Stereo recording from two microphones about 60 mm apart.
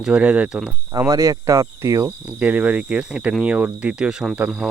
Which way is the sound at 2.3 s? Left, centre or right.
Right.